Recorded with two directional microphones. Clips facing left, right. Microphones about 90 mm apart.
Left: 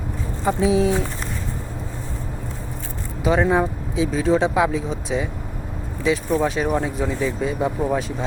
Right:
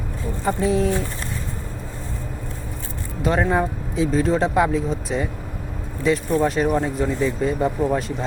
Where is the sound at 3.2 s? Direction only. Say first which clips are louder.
Left 2 dB; 5° left (ahead or behind).